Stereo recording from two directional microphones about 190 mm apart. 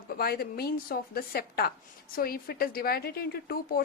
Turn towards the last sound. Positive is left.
turn(degrees=55)  # may be behind; listen again after turning